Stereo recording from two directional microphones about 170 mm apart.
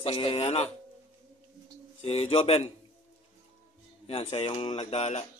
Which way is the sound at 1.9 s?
35° left (ahead or behind).